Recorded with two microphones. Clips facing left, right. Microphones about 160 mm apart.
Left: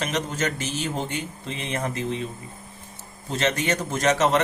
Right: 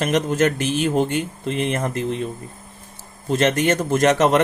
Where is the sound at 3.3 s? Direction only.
55° right (ahead or behind).